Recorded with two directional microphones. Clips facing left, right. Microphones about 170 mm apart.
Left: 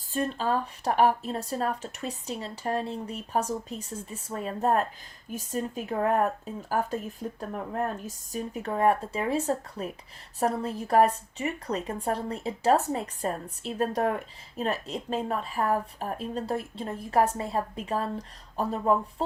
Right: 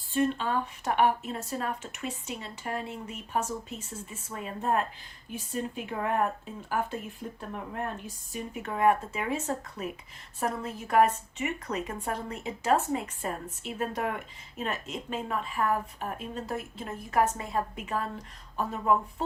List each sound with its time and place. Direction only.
0.1 s speech: 35° left (ahead or behind)